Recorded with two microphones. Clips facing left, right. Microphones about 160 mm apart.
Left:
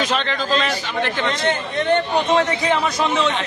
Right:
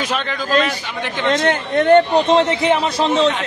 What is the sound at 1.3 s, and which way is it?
Speech, 50° right (ahead or behind).